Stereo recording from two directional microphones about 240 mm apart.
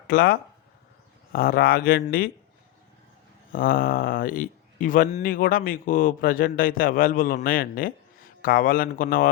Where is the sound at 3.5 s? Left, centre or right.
Left.